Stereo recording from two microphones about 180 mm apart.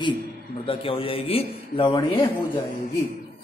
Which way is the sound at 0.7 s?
30° left (ahead or behind).